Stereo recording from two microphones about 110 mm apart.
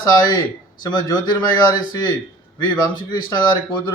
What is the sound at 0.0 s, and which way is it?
Speech, 35° left (ahead or behind).